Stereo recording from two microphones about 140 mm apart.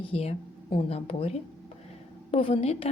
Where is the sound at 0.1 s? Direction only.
45° left (ahead or behind).